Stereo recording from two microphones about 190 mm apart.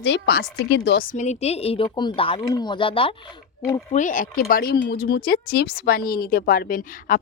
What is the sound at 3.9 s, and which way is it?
Speech, 40° left (ahead or behind).